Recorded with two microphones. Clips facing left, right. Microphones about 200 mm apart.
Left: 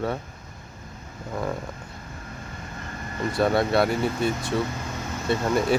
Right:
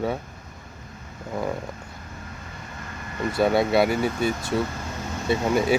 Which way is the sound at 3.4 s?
Centre (ahead or behind).